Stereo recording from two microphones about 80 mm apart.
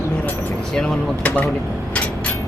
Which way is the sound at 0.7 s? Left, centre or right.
Centre.